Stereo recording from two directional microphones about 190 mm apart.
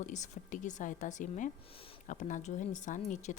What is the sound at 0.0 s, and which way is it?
A woman's voice, 40° left (ahead or behind).